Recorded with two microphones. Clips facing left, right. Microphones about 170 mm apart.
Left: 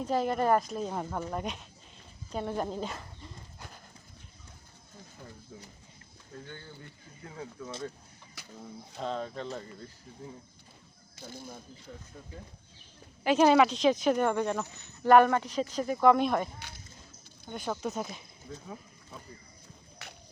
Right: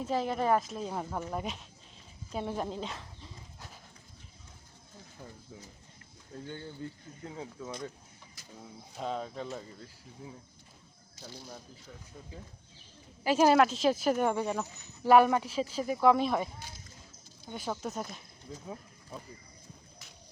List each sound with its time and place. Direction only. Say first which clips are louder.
0.0 s speech: left 2 dB; centre (ahead or behind)
6.8 s speech: right 10 dB; 25° right (ahead or behind)
8.6 s speech: left 1 dB; 5° right (ahead or behind)
11.2 s speech: left 3 dB; 50° left (ahead or behind)
13.2 s speech: left 1 dB; 5° right (ahead or behind)
16.6 s a sound: even; 70° left (ahead or behind)
17.4 s speech: left 2 dB; 5° right (ahead or behind)
18.5 s speech: left 1 dB; 20° right (ahead or behind)
20.0 s walk: left 7 dB; 70° left (ahead or behind)